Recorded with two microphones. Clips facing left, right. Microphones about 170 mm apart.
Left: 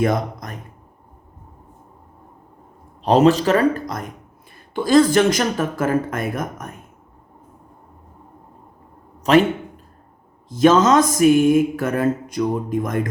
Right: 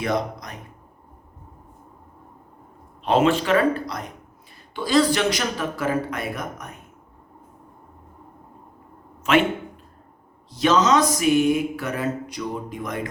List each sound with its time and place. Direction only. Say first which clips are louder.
0.0 s mantra: left 4 dB; 50° left (ahead or behind)
3.0 s a man's voice: left 5 dB; 40° left (ahead or behind)
4.7 s mantra: left 5 dB; 50° left (ahead or behind)
9.2 s a sound: left 5 dB; 40° left (ahead or behind)
10.5 s mantra: left 5 dB; 50° left (ahead or behind)